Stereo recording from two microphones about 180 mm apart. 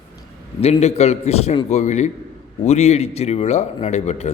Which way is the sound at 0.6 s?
35° left (ahead or behind).